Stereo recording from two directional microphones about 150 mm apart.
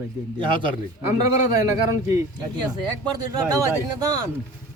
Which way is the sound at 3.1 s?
25° right (ahead or behind).